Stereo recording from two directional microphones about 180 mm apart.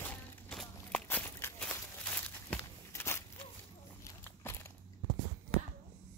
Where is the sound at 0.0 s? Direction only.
5° left (ahead or behind).